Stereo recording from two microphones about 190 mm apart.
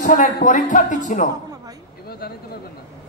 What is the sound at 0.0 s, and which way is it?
A woman's voice, 40° left (ahead or behind).